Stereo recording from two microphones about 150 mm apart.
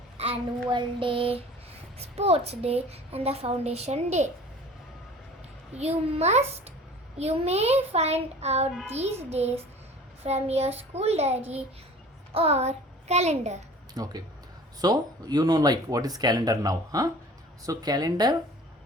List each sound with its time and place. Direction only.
0.2 s child singing: 35° right (ahead or behind)
2.0 s a child's voice: 45° right (ahead or behind)
5.7 s a woman's voice: 45° right (ahead or behind)
13.9 s speech: 25° right (ahead or behind)